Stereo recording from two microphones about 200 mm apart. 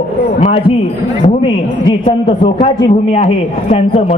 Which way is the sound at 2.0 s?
25° left (ahead or behind).